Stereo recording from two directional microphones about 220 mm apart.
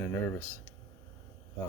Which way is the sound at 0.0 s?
10° left (ahead or behind).